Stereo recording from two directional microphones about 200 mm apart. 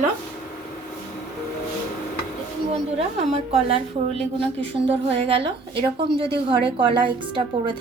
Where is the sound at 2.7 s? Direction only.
30° right (ahead or behind).